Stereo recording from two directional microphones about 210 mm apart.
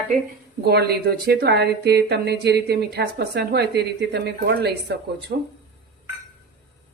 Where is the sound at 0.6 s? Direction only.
50° right (ahead or behind).